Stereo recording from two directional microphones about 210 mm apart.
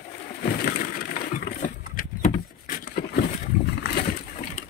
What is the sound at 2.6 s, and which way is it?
Vehicle, 40° left (ahead or behind).